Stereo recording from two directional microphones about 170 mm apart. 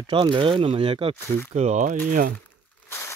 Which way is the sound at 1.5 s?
40° right (ahead or behind).